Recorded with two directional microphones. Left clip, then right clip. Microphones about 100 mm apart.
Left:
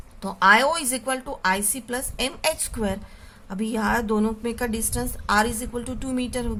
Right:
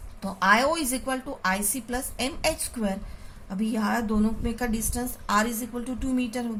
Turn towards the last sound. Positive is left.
turn(degrees=65)  # may be behind; listen again after turning